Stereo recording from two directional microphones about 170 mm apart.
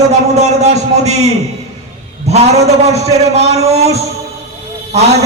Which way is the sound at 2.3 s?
40° right (ahead or behind).